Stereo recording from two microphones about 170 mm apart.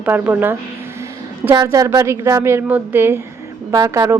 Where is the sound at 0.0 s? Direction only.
10° right (ahead or behind).